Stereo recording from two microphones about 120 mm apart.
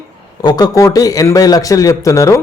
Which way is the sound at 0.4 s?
30° left (ahead or behind).